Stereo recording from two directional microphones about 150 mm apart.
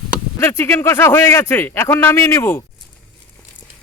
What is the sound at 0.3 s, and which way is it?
A man's voice, 15° left (ahead or behind).